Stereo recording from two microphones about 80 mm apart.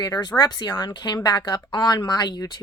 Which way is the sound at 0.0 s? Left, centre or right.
Left.